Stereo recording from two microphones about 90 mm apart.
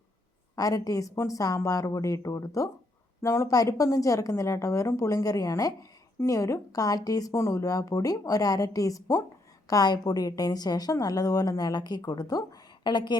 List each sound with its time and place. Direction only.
0.5 s a woman's voice: 40° left (ahead or behind)
12.8 s a woman's voice: 60° left (ahead or behind)